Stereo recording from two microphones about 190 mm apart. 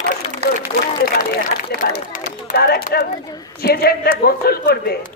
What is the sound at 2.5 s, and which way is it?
Speech, 55° left (ahead or behind).